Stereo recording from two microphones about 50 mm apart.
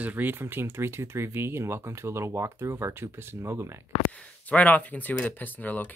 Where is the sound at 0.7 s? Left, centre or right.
Right.